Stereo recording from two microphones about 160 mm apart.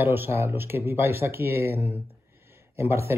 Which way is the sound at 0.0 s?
15° right (ahead or behind).